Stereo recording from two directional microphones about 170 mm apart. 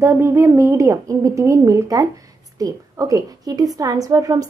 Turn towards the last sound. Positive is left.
turn(degrees=-20)  # may be behind; listen again after turning